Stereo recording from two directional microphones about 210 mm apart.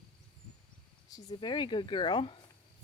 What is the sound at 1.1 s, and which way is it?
Speech, 20° left (ahead or behind).